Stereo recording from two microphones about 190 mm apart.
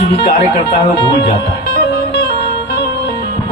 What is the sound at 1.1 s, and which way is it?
Speech, 55° left (ahead or behind).